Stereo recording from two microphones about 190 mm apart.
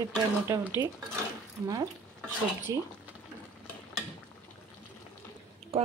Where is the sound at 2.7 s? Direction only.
20° right (ahead or behind).